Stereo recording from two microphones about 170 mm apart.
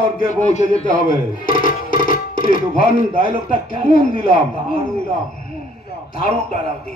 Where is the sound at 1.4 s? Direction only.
55° left (ahead or behind).